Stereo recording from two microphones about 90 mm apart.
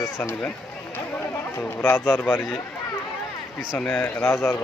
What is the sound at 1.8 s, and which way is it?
Speech, 25° left (ahead or behind).